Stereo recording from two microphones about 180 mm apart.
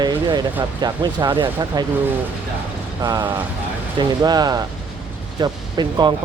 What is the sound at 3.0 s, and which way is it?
Speech, 20° right (ahead or behind).